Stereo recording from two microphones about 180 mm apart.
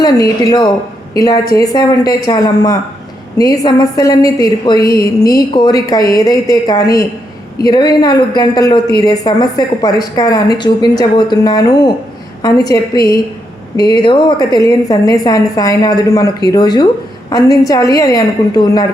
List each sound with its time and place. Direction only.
0.0 s a woman's voice: 20° left (ahead or behind)